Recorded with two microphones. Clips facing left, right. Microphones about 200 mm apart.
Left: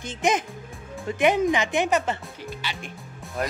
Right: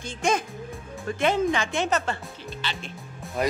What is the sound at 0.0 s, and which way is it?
A child's voice, 20° left (ahead or behind).